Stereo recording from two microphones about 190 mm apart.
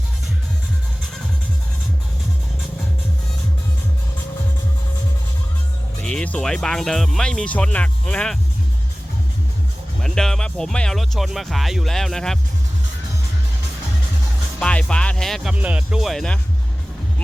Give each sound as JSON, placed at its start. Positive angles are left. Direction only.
{"t": 6.0, "sound": "speech", "side_deg": 5}
{"t": 10.0, "sound": "speech", "side_deg": 0}
{"t": 14.6, "sound": "speech", "side_deg": 5}